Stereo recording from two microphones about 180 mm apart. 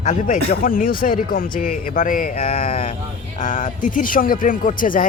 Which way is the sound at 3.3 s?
50° left (ahead or behind).